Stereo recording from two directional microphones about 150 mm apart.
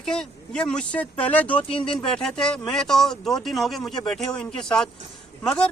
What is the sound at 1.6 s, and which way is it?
Speech, 35° left (ahead or behind).